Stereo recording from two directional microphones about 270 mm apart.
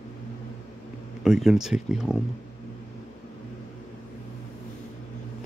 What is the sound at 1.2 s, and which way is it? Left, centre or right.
Speech, centre.